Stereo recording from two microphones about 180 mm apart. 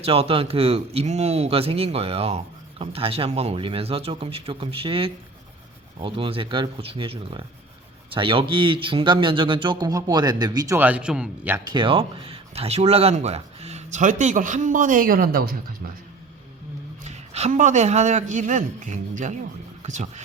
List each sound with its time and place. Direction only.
0.0 s speech: 35° right (ahead or behind)
10.8 s a man's voice: 5° right (ahead or behind)
11.7 s speech: 30° right (ahead or behind); by 15.9 s 55° right (ahead or behind)
17.0 s speech: 40° right (ahead or behind)